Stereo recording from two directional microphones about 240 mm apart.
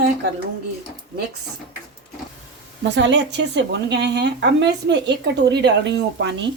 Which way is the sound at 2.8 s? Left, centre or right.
Right.